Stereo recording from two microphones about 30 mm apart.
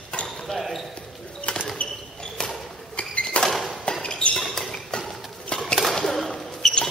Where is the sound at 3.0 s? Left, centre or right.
Left.